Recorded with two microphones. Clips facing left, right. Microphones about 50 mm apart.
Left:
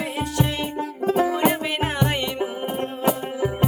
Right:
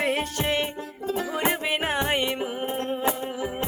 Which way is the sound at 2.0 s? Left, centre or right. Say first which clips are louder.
Left 2 dB; centre.